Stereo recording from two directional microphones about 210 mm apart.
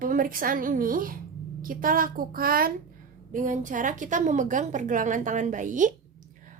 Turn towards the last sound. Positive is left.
turn(degrees=-35)  # may be behind; listen again after turning